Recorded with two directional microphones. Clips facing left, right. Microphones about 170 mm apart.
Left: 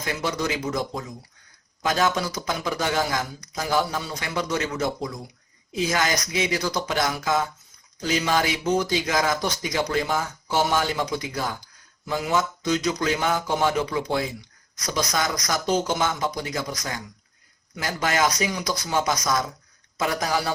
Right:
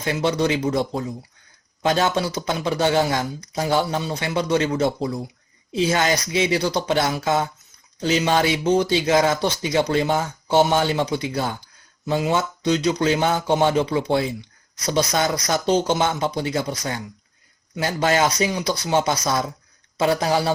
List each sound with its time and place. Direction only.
0.0 s speech: 25° right (ahead or behind)